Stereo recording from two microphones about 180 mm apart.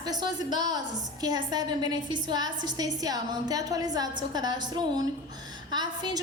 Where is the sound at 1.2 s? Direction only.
20° right (ahead or behind).